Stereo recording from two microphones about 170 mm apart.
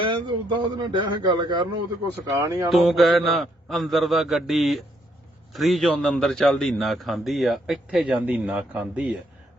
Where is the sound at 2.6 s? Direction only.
Centre (ahead or behind).